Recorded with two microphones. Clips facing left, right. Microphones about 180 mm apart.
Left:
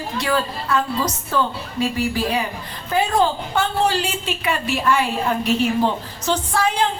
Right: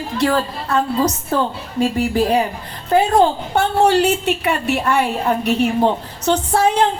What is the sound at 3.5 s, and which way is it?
A woman's voice, 65° right (ahead or behind).